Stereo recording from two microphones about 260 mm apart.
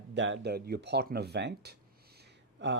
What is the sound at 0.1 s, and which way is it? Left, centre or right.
Speech, right.